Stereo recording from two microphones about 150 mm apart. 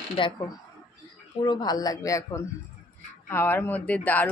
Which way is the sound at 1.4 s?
30° left (ahead or behind).